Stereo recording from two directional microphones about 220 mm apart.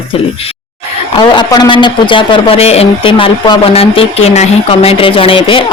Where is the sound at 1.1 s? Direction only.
20° left (ahead or behind).